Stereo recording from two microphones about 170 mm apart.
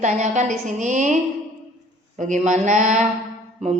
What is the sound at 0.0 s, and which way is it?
Speech, 45° right (ahead or behind).